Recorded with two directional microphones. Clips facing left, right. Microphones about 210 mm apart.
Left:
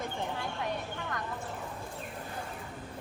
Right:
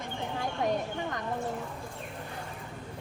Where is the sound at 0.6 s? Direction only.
45° right (ahead or behind).